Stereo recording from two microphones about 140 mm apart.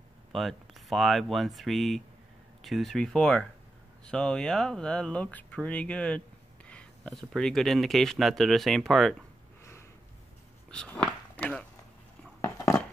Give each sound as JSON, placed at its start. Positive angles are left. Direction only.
{"t": 0.3, "sound": "speech", "side_deg": 0}
{"t": 10.7, "sound": "speech", "side_deg": 5}
{"t": 12.4, "sound": "a sound", "side_deg": 20}